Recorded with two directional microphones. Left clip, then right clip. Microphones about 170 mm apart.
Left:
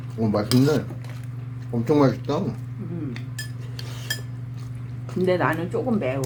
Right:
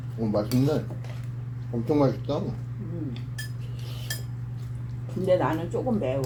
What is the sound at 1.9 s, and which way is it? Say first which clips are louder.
Speech: left 4 dB; 35° left (ahead or behind).